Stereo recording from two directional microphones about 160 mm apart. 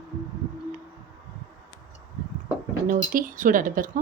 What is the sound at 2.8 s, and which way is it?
Speech, 60° right (ahead or behind).